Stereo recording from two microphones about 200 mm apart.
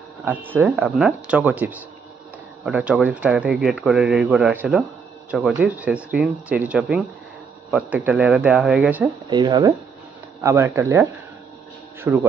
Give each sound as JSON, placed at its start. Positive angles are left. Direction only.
{"t": 0.2, "sound": "speech", "side_deg": -10}
{"t": 9.3, "sound": "speech", "side_deg": -20}